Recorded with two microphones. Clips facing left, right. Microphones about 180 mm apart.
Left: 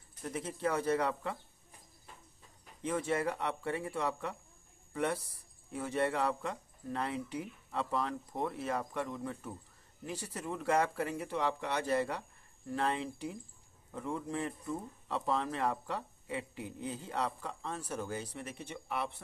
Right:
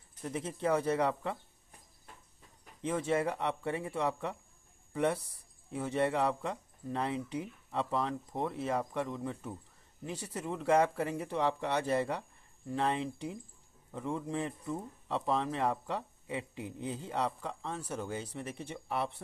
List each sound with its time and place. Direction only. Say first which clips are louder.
0.2 s speech: right 1 dB; 25° right (ahead or behind)
2.8 s speech: right 2 dB; 25° right (ahead or behind)